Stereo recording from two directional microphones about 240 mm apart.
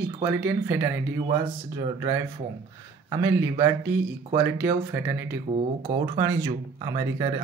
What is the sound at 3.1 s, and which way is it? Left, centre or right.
Speech, centre.